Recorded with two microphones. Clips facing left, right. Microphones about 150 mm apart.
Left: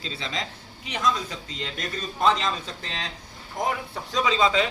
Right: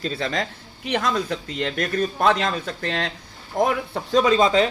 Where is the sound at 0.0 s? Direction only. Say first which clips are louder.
Right 7 dB; 55° right (ahead or behind).